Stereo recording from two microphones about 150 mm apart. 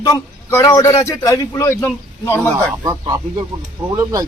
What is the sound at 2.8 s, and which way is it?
Speech, 25° right (ahead or behind).